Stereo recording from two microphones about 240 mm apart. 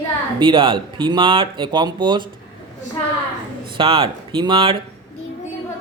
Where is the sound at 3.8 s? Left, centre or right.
Right.